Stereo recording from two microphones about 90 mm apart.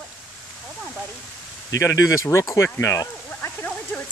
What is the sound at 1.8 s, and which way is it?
Speech, 35° left (ahead or behind).